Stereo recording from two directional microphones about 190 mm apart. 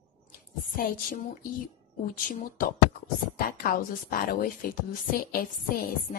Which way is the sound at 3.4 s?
50° left (ahead or behind).